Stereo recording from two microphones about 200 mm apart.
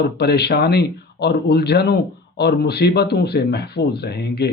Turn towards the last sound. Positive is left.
turn(degrees=55)  # may be behind; listen again after turning